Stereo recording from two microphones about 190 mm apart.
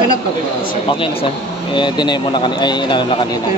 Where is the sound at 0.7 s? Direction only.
25° left (ahead or behind).